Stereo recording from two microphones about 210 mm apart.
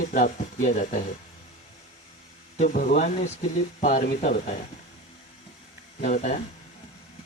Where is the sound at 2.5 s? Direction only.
35° left (ahead or behind).